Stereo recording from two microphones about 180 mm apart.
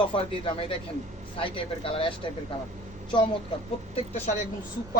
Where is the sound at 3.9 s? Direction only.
35° left (ahead or behind).